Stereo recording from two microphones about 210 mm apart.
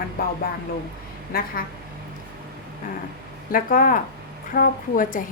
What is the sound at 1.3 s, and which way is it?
Speech, 45° left (ahead or behind).